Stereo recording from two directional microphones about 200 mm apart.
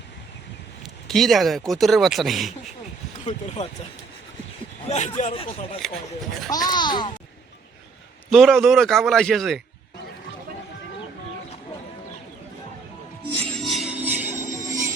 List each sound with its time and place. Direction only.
1.0 s speech: centre (ahead or behind)
3.2 s speech: 35° left (ahead or behind)
4.9 s speech: 35° left (ahead or behind)
5.8 s speech: centre (ahead or behind)
6.5 s speech: 20° left (ahead or behind)
8.3 s speech: centre (ahead or behind)
13.4 s music: centre (ahead or behind)
14.3 s music: 35° right (ahead or behind)